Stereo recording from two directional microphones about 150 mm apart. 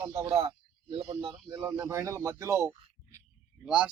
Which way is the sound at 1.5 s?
20° right (ahead or behind).